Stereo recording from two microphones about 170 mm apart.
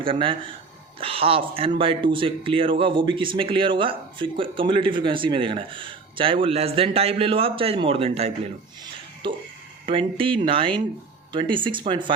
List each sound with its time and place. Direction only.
0.0 s speech: 30° right (ahead or behind)